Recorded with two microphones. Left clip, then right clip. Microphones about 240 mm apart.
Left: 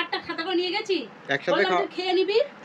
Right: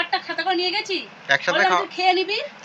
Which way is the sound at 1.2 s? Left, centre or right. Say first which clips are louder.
Right 5 dB; centre.